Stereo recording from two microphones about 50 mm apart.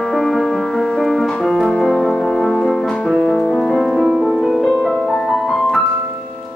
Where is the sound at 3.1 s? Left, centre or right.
Centre.